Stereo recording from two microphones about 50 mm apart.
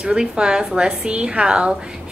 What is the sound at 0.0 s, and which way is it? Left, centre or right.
A woman's voice, centre.